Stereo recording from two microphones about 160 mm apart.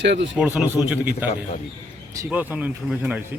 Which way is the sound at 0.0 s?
90° right.